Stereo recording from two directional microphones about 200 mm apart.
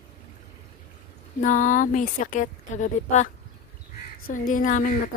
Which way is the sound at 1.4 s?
40° left (ahead or behind).